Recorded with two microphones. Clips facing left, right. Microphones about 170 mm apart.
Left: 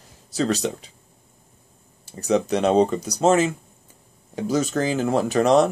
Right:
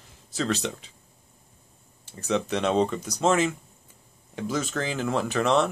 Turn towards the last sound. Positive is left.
turn(degrees=40)  # may be behind; listen again after turning